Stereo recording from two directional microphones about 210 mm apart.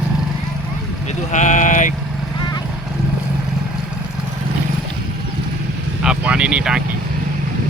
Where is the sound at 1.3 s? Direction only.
35° left (ahead or behind).